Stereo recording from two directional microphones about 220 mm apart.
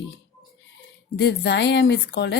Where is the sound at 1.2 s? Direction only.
50° left (ahead or behind).